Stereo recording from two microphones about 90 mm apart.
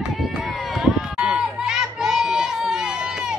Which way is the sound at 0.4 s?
Centre (ahead or behind).